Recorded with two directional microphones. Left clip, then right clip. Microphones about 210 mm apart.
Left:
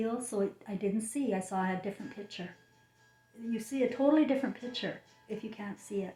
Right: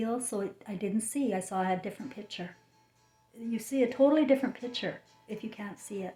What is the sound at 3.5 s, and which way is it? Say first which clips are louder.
Speech: right 3 dB; 40° right (ahead or behind).